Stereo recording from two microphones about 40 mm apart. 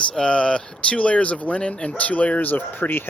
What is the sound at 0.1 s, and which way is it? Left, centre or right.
Speech, left.